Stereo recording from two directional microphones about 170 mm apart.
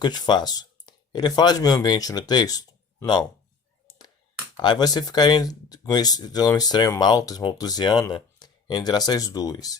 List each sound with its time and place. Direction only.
0.0 s speech: 25° left (ahead or behind)
3.8 s clicking: 25° left (ahead or behind)
4.5 s speech: 25° left (ahead or behind)